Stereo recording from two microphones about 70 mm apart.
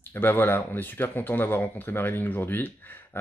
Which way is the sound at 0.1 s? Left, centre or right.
Left.